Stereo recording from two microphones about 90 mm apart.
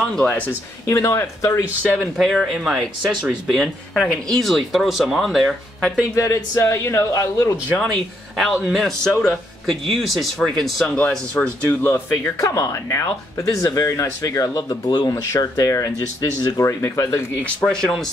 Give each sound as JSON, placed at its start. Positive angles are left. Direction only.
{"t": 0.0, "sound": "speech", "side_deg": 10}
{"t": 0.8, "sound": "speech", "side_deg": 35}
{"t": 2.1, "sound": "speech", "side_deg": 0}
{"t": 6.1, "sound": "speech", "side_deg": 35}
{"t": 7.8, "sound": "speech", "side_deg": 0}
{"t": 11.0, "sound": "speech", "side_deg": 15}
{"t": 11.9, "sound": "speech", "side_deg": 35}
{"t": 17.6, "sound": "speech", "side_deg": 5}